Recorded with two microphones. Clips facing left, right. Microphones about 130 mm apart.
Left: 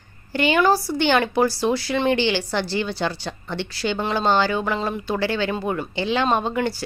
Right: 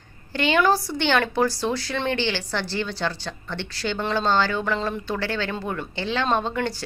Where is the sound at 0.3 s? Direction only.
10° left (ahead or behind).